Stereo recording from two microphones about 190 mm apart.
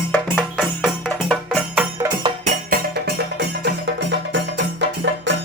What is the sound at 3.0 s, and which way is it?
Music, 60° right (ahead or behind).